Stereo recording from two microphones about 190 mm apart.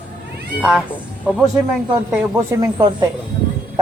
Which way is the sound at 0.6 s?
5° right (ahead or behind).